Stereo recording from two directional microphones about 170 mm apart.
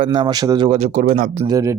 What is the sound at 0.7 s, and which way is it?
Speech, 45° right (ahead or behind).